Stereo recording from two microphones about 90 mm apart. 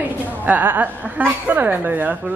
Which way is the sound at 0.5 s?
20° right (ahead or behind).